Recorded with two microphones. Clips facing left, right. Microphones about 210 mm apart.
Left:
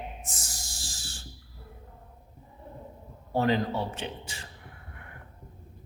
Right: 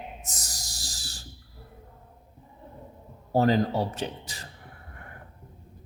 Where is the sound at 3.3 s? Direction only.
40° right (ahead or behind).